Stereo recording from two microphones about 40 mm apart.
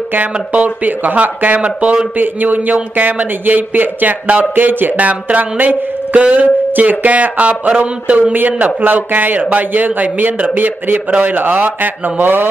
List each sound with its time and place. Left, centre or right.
0.1 s a man's voice: right
2.1 s a man's voice: right
4.9 s speech: right
8.2 s a man's voice: right